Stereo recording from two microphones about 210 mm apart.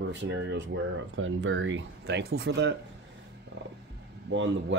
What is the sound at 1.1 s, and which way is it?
Speech, 70° right (ahead or behind).